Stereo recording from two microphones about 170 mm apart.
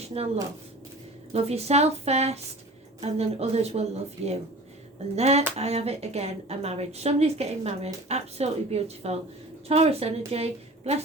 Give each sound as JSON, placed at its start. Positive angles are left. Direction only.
{"t": 0.0, "sound": "speech", "side_deg": -35}
{"t": 1.3, "sound": "a woman's voice", "side_deg": -35}
{"t": 5.1, "sound": "a woman's voice", "side_deg": -40}